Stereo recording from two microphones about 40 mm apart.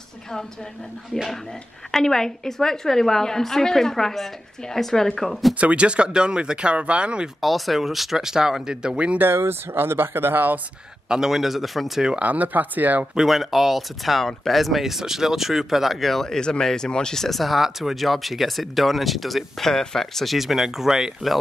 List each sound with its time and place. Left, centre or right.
1.9 s a woman's voice: centre
5.6 s speech: right
7.3 s speech: centre; by 9.2 s right
9.2 s speech: right
11.1 s speech: centre
12.2 s speech: right
13.1 s speech: centre
16.3 s speech: centre
17.2 s speech: centre
19.7 s a woman's voice: centre
20.3 s speech: centre